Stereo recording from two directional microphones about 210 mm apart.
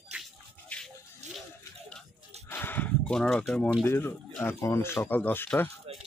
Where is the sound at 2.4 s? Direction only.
10° left (ahead or behind).